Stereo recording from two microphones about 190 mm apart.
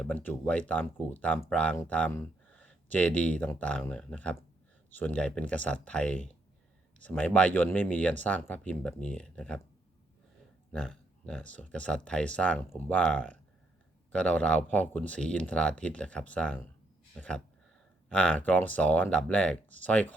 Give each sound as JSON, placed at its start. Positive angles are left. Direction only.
{"t": 0.0, "sound": "speech", "side_deg": 10}
{"t": 10.7, "sound": "speech", "side_deg": 5}